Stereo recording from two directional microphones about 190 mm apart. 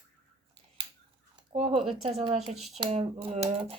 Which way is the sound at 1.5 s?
30° right (ahead or behind).